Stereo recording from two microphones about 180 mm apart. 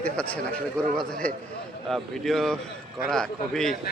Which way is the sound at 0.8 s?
5° left (ahead or behind).